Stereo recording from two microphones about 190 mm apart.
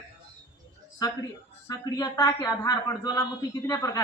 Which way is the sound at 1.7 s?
15° left (ahead or behind).